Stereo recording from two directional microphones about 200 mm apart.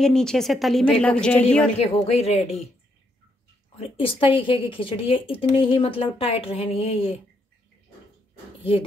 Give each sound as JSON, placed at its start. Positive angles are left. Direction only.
{"t": 0.0, "sound": "a woman's voice", "side_deg": 5}
{"t": 1.8, "sound": "speech", "side_deg": 30}
{"t": 3.7, "sound": "a woman's voice", "side_deg": 30}